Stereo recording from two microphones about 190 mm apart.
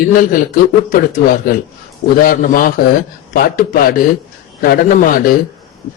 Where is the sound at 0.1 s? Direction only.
45° left (ahead or behind).